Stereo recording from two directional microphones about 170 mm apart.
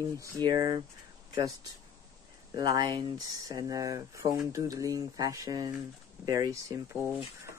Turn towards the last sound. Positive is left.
turn(degrees=-15)  # may be behind; listen again after turning